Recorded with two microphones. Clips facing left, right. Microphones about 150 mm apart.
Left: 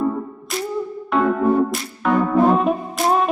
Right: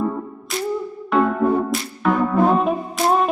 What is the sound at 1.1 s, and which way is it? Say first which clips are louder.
Music: left 1 dB; centre (ahead or behind).